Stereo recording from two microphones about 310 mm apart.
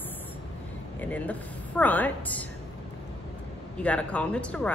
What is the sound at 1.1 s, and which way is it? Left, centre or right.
Speech, centre.